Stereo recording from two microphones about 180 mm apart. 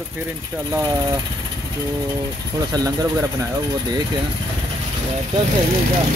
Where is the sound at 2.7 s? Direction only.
20° right (ahead or behind).